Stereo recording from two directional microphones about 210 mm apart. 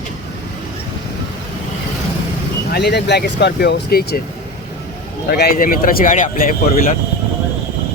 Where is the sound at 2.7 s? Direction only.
50° left (ahead or behind).